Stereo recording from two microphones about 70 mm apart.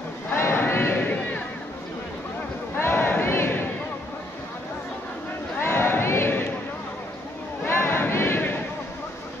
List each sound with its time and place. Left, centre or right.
0.3 s crowd: left
2.8 s crowd: left
5.6 s crowd: left
7.6 s choir: left